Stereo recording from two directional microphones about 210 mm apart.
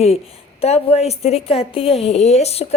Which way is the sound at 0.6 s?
30° left (ahead or behind).